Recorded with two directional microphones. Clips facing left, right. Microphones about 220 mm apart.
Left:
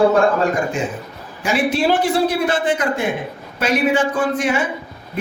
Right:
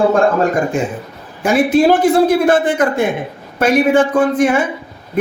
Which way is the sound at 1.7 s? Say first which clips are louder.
Right 8 dB; 50° right (ahead or behind).